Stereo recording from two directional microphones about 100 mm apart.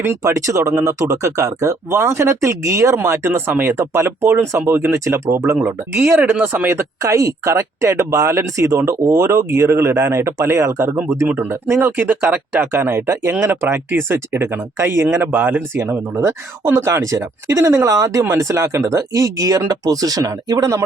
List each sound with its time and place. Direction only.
0.0 s speech: 25° right (ahead or behind)